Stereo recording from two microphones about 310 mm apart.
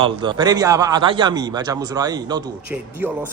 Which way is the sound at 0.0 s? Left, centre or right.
Centre.